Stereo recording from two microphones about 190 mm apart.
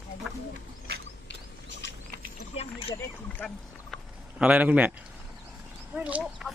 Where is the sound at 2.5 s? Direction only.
30° left (ahead or behind).